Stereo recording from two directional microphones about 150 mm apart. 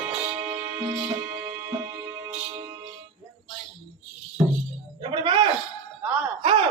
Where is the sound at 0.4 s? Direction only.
30° right (ahead or behind).